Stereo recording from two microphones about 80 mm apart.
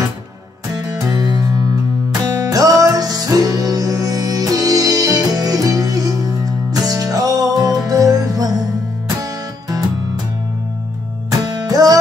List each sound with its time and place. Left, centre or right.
0.7 s music: right
11.2 s music: right